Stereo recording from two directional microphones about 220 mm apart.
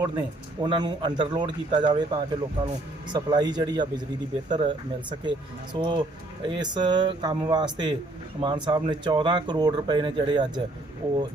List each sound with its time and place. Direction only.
0.6 s speech: 20° right (ahead or behind)